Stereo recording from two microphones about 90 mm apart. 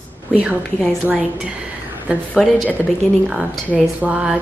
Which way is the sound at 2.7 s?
20° right (ahead or behind).